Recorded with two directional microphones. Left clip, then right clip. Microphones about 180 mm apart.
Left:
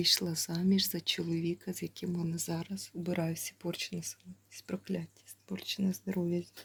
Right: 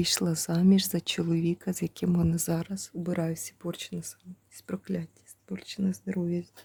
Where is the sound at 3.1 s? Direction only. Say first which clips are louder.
Right 3 dB; 25° right (ahead or behind).